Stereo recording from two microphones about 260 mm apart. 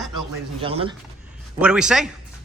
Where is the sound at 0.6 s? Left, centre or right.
Right.